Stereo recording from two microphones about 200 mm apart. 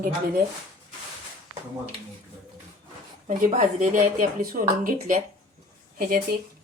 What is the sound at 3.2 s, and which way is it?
A woman's voice, 35° right (ahead or behind).